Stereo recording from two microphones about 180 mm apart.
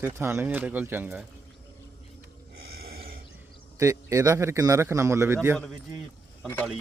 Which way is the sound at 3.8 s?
15° right (ahead or behind).